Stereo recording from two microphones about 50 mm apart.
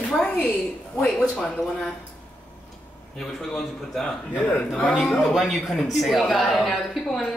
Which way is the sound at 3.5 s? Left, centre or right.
Centre.